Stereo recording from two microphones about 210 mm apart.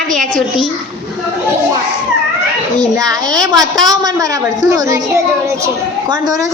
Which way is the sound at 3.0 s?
15° right (ahead or behind).